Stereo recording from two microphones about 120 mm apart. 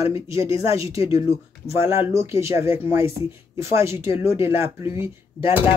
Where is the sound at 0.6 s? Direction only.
25° right (ahead or behind).